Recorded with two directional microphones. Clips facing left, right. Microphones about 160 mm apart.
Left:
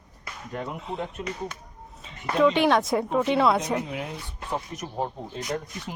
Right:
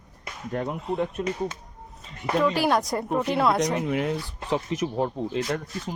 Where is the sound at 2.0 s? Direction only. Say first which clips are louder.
Left 2 dB; centre (ahead or behind).